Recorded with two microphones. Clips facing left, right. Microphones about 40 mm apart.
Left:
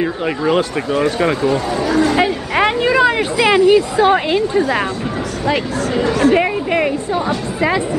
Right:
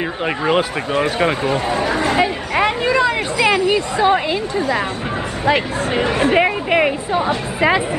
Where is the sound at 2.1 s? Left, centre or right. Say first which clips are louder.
Left 2 dB; centre.